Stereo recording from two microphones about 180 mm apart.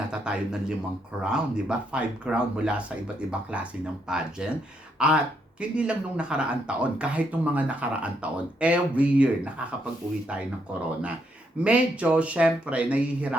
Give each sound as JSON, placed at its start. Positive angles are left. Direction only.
{"t": 0.1, "sound": "a sound", "side_deg": -5}
{"t": 1.2, "sound": "speech", "side_deg": -5}
{"t": 11.6, "sound": "speech", "side_deg": -5}